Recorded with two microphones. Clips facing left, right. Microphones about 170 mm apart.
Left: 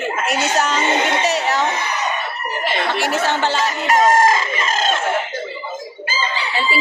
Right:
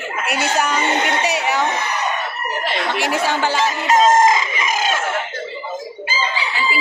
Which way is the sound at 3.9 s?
20° right (ahead or behind).